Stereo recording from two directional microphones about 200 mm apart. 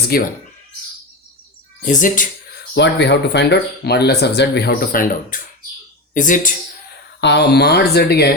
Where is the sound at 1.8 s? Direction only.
40° left (ahead or behind).